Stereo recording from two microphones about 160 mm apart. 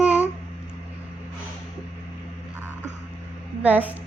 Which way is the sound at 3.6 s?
10° right (ahead or behind).